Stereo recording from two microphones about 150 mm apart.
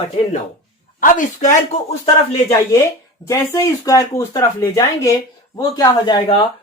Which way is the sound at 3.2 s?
20° left (ahead or behind).